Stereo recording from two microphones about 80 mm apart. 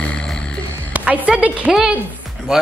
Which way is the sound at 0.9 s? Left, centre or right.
Centre.